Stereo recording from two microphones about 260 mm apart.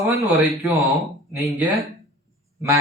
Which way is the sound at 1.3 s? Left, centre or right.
Centre.